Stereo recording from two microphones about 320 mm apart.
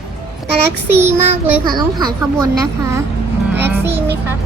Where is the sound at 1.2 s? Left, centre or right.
Centre.